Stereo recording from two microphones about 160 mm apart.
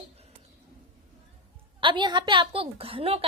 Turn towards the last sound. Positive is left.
turn(degrees=-35)  # may be behind; listen again after turning